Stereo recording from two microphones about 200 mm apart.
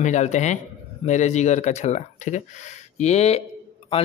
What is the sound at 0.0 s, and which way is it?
A man's voice, 35° left (ahead or behind).